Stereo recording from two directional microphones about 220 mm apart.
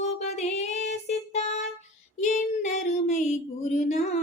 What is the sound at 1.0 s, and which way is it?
Music, 30° left (ahead or behind).